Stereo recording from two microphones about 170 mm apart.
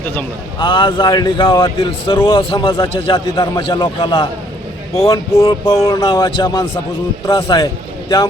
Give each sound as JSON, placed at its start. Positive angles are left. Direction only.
{"t": 0.6, "sound": "a man's voice", "side_deg": 25}